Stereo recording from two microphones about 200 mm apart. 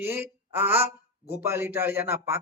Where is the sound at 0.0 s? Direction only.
10° right (ahead or behind).